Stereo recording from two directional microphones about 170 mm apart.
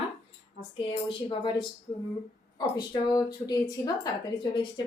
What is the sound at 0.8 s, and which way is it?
A woman's voice, 30° left (ahead or behind).